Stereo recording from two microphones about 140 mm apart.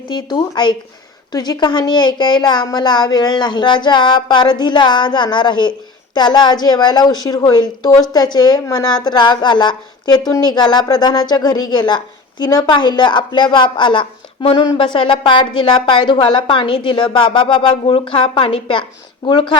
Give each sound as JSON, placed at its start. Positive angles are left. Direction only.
{"t": 0.1, "sound": "a woman's voice", "side_deg": 30}